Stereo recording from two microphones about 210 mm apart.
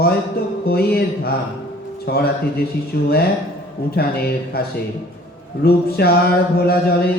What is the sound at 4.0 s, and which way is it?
Speech, 50° left (ahead or behind).